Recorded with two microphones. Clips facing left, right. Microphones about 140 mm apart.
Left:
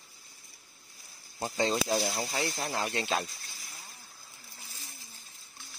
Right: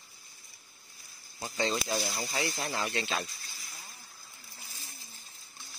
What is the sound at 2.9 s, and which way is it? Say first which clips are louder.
Speech: left 2 dB; 45° left (ahead or behind).